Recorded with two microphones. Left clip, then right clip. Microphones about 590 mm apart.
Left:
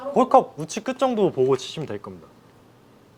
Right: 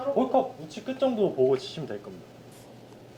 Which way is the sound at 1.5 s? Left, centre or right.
Left.